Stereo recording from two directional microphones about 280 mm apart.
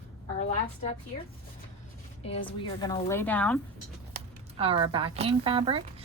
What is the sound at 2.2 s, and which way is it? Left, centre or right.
A woman's voice, centre.